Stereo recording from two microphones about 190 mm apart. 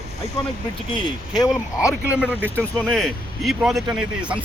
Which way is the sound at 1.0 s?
20° left (ahead or behind).